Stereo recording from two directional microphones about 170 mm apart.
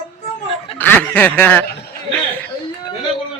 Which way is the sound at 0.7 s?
10° left (ahead or behind).